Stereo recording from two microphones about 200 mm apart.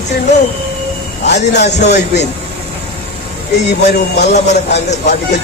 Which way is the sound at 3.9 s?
55° left (ahead or behind).